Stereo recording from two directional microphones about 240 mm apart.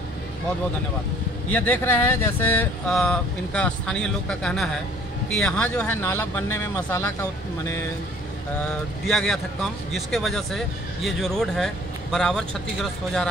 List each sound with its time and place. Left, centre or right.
1.5 s speech: centre
8.5 s speech: centre